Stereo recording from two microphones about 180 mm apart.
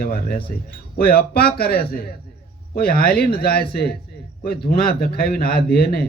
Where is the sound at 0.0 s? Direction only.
55° left (ahead or behind).